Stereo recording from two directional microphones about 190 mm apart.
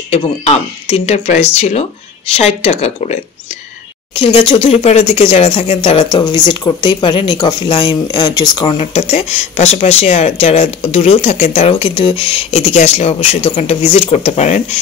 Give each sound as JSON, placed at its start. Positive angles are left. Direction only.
{"t": 0.1, "sound": "speech", "side_deg": 30}